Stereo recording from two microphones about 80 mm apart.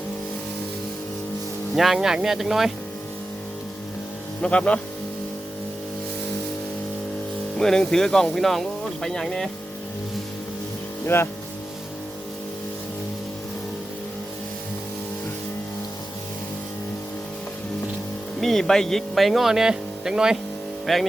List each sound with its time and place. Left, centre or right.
1.7 s speech: centre
4.4 s speech: centre
7.5 s speech: centre
11.0 s speech: left
18.3 s speech: centre